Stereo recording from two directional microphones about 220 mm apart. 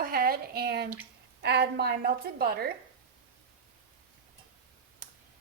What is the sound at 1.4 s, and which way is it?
Speech, 50° right (ahead or behind).